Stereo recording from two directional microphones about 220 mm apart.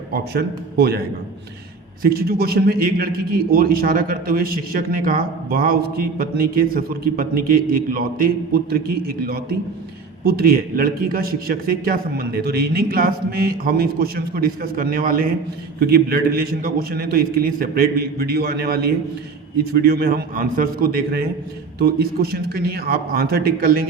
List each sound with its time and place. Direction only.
0.1 s a man's voice: 45° right (ahead or behind)
19.8 s a man's voice: 45° right (ahead or behind)